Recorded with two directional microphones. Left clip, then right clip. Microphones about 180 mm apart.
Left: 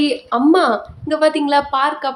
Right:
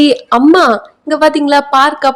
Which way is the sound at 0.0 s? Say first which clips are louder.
Right 8 dB; 45° right (ahead or behind).